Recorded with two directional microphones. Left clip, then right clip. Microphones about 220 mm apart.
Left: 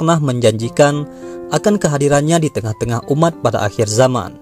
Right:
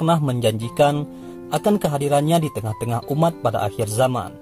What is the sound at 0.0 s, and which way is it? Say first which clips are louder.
Speech: left 6 dB; 25° left (ahead or behind).